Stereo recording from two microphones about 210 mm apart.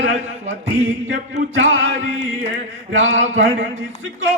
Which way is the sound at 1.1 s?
65° right (ahead or behind).